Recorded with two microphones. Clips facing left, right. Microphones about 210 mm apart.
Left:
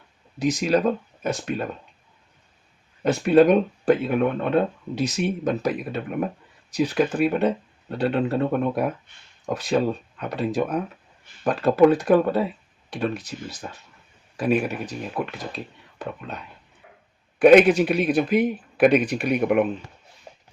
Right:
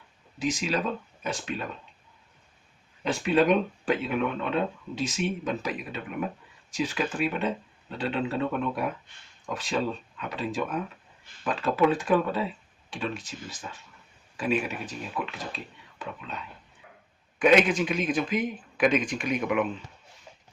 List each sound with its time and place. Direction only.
0.3 s speech: 40° left (ahead or behind)
3.0 s speech: 55° left (ahead or behind)
6.8 s speech: 55° left (ahead or behind)
10.2 s speech: 55° left (ahead or behind)
10.5 s speech: 40° left (ahead or behind)
13.6 s speech: 45° left (ahead or behind)
17.4 s speech: 60° left (ahead or behind)